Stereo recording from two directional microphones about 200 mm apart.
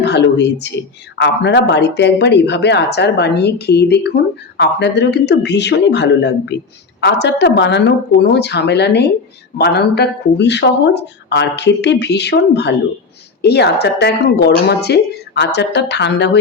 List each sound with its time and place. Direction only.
0.0 s speech: 55° left (ahead or behind)